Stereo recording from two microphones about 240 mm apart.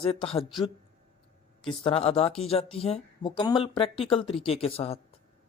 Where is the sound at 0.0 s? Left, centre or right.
Left.